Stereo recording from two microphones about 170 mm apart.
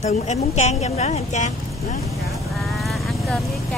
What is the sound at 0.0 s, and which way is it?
A woman's voice, 40° left (ahead or behind).